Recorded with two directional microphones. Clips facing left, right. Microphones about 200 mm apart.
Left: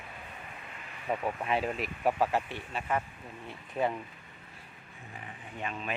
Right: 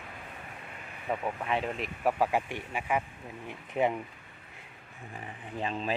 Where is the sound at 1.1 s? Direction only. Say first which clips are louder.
Even; 5° left (ahead or behind).